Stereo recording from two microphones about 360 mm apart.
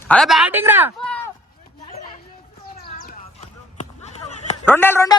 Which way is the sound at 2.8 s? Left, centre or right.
Left.